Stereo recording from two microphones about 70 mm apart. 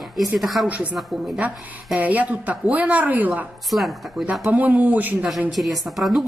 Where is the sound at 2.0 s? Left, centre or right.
Right.